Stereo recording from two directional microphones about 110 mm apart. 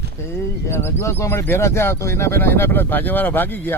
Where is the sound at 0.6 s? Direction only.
25° left (ahead or behind).